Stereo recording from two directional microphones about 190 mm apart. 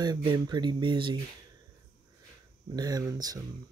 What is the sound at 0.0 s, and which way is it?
Speech, 25° right (ahead or behind).